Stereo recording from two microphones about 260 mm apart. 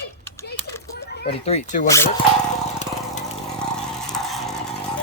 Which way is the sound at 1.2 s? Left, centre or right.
Left.